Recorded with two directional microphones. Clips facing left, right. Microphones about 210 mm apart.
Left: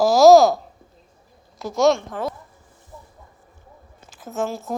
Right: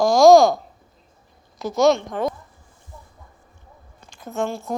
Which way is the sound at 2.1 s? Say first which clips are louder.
Right 3 dB; 15° right (ahead or behind).